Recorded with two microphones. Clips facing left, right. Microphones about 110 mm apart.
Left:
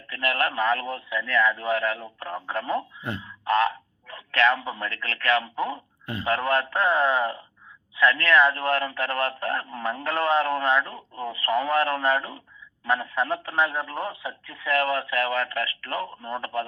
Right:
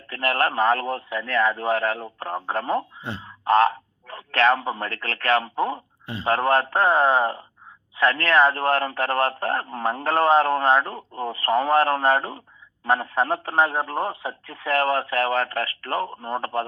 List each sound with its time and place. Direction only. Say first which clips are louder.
0.1 s a man's voice: right 3 dB; 35° right (ahead or behind)
3.7 s frog: right 3 dB; 35° right (ahead or behind)
4.6 s a man's voice: right 3 dB; 30° right (ahead or behind)
10.8 s a man's voice: right 3 dB; 40° right (ahead or behind)